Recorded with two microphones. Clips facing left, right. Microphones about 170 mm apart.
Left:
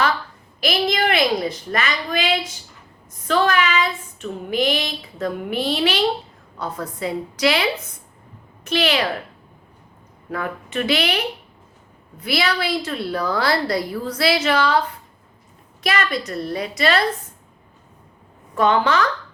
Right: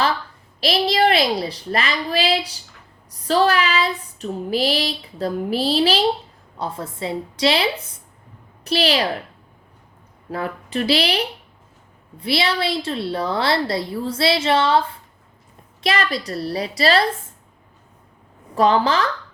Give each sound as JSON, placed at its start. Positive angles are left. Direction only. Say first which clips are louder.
{"t": 0.6, "sound": "child singing", "louder": "right 3 dB", "side_deg": -30}
{"t": 6.6, "sound": "a woman's voice", "louder": "even", "side_deg": -25}
{"t": 8.6, "sound": "child singing", "louder": "right 1 dB", "side_deg": -35}
{"t": 10.3, "sound": "child singing", "louder": "right 1 dB", "side_deg": -30}
{"t": 12.2, "sound": "a woman's voice", "louder": "right 1 dB", "side_deg": -25}
{"t": 15.8, "sound": "child singing", "louder": "right 1 dB", "side_deg": -30}
{"t": 18.5, "sound": "child singing", "louder": "right 1 dB", "side_deg": -35}